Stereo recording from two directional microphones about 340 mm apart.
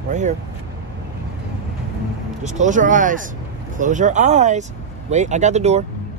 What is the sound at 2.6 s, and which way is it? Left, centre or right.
Speech, right.